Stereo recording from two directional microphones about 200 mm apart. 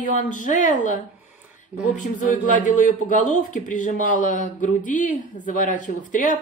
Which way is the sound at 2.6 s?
40° left (ahead or behind).